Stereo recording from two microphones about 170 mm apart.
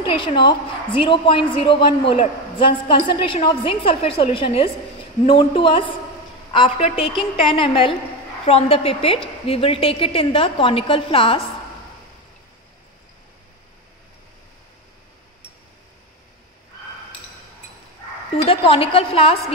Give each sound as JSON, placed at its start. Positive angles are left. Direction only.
{"t": 0.1, "sound": "a woman's voice", "side_deg": 30}
{"t": 18.3, "sound": "a woman's voice", "side_deg": 35}